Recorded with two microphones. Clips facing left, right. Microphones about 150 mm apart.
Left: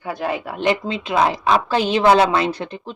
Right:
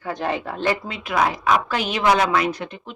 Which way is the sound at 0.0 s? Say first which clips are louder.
Left 1 dB; 10° left (ahead or behind).